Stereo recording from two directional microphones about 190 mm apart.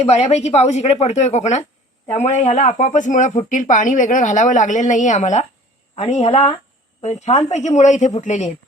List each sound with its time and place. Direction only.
0.0 s speech: 35° left (ahead or behind)